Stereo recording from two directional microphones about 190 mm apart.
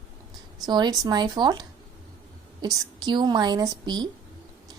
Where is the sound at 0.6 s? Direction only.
20° right (ahead or behind).